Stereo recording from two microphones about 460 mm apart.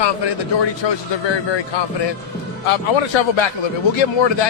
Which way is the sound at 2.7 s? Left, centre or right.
Left.